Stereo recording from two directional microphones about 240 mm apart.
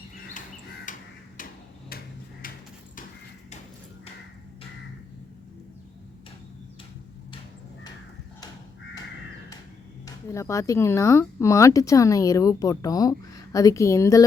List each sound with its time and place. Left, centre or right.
0.9 s crow: left
10.1 s speech: centre